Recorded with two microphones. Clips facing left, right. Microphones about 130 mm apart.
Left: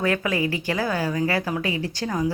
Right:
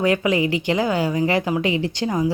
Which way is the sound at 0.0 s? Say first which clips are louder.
Right 4 dB; 15° right (ahead or behind).